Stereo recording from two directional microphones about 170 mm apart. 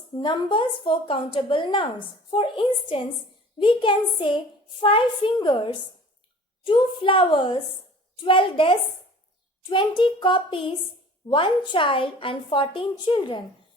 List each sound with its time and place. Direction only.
0.2 s a woman's voice: 25° left (ahead or behind)